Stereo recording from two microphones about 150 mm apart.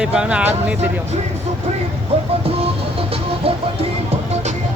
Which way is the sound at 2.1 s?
45° right (ahead or behind).